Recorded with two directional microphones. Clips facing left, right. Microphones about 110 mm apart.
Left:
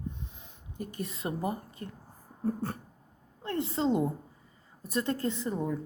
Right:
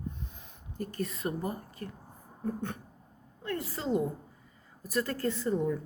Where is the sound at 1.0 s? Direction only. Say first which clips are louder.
Left 2 dB; 25° left (ahead or behind).